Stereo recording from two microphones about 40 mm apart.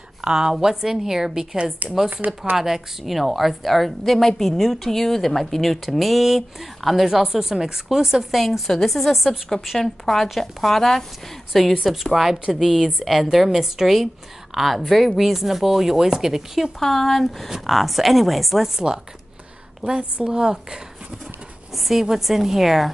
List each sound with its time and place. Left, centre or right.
0.2 s speech: centre
1.8 s speech: right
2.5 s a woman's voice: centre
8.4 s a woman's voice: centre
11.8 s a woman's voice: centre
16.8 s a woman's voice: centre
20.2 s speech: centre
21.7 s a woman's voice: centre